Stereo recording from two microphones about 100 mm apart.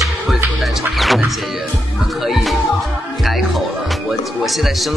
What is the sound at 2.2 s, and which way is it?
Speech, 5° right (ahead or behind).